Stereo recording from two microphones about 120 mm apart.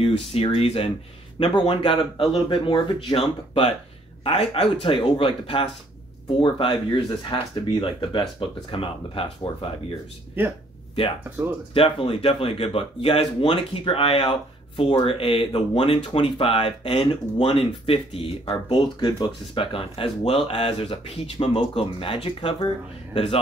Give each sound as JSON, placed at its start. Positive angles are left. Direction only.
{"t": 0.0, "sound": "speech", "side_deg": 50}
{"t": 1.4, "sound": "speech", "side_deg": 40}
{"t": 4.2, "sound": "speech", "side_deg": 55}
{"t": 11.2, "sound": "speech", "side_deg": -20}
{"t": 11.7, "sound": "speech", "side_deg": 50}